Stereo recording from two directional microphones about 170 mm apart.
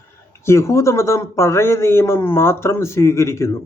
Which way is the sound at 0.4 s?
15° left (ahead or behind).